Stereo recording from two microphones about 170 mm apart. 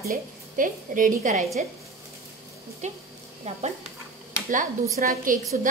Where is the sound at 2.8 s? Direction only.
40° right (ahead or behind).